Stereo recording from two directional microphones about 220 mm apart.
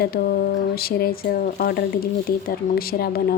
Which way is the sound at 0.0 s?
45° left (ahead or behind).